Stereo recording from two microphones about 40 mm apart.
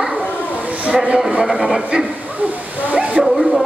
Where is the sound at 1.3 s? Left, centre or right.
Right.